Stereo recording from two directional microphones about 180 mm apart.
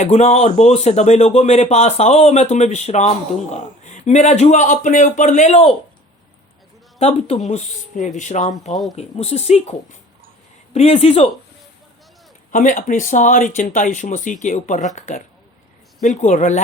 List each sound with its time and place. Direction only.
0.0 s speech: 35° left (ahead or behind)
7.0 s speech: 35° left (ahead or behind)
12.5 s speech: 45° left (ahead or behind)